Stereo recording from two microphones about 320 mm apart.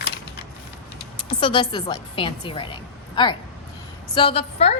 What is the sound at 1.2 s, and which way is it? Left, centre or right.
A woman's voice, centre.